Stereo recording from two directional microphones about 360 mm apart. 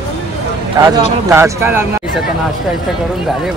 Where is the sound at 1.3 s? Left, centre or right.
Centre.